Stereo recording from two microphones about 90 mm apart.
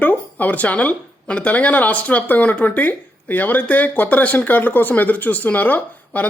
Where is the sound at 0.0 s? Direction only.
20° left (ahead or behind).